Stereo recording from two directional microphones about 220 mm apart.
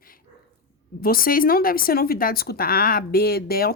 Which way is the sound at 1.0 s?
40° left (ahead or behind).